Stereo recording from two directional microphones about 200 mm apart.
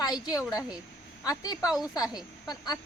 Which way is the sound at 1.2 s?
20° left (ahead or behind).